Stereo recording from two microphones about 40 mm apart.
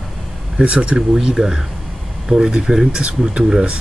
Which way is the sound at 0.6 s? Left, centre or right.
Right.